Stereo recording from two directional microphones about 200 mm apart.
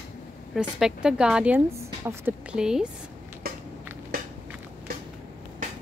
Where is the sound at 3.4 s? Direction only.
50° right (ahead or behind).